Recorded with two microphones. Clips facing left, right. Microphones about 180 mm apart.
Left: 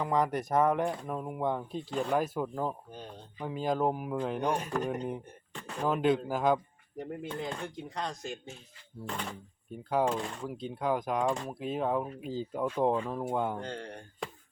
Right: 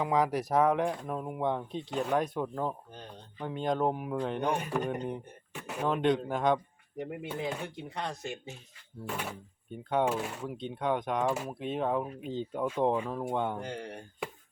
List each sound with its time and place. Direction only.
0.0 s speech: centre (ahead or behind)
12.8 s speech: 10° right (ahead or behind)
13.1 s speech: 5° left (ahead or behind)
13.6 s speech: 10° right (ahead or behind)